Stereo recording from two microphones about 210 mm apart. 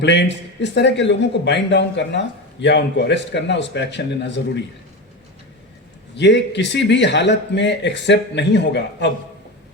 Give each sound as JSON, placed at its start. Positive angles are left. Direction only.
{"t": 0.0, "sound": "a man's voice", "side_deg": 55}
{"t": 6.1, "sound": "a man's voice", "side_deg": 55}